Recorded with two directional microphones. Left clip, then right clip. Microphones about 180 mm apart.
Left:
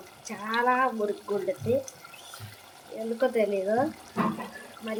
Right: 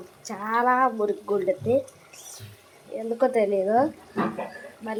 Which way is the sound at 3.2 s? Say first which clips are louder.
Right 4 dB; 10° right (ahead or behind).